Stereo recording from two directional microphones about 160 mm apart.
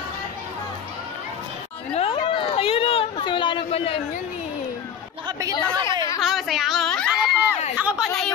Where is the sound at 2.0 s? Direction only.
35° left (ahead or behind).